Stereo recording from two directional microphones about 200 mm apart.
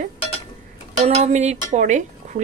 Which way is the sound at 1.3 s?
35° right (ahead or behind).